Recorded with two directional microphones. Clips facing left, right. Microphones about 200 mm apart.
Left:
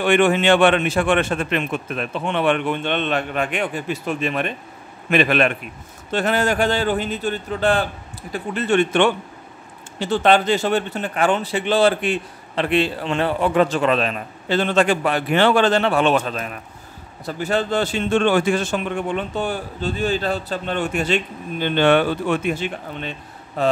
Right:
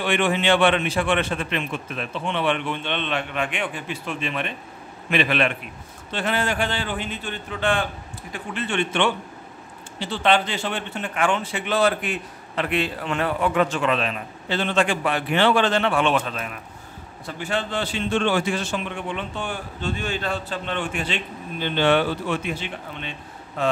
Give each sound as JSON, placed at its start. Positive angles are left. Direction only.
{"t": 0.0, "sound": "a man's voice", "side_deg": 50}